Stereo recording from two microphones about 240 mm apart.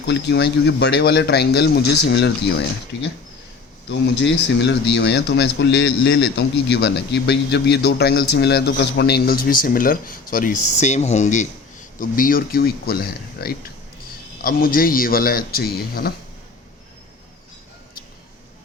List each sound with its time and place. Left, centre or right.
0.0 s speech: left
3.8 s speech: left